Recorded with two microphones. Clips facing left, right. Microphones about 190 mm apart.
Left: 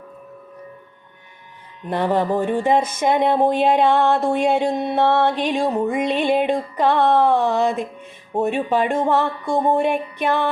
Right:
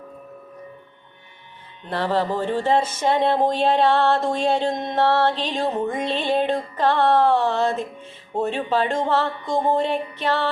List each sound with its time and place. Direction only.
1.9 s speech: 15° left (ahead or behind)